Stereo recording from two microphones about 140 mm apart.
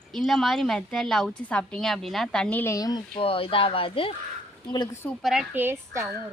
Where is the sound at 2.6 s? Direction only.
25° left (ahead or behind).